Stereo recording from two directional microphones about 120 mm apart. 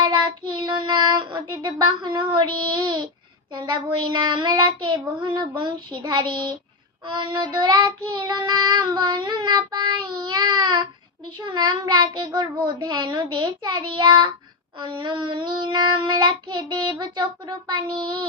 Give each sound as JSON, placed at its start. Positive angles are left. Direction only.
{"t": 0.5, "sound": "child singing", "side_deg": -40}